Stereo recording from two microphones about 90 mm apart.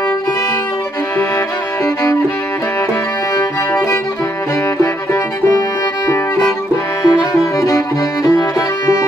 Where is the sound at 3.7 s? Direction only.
30° left (ahead or behind).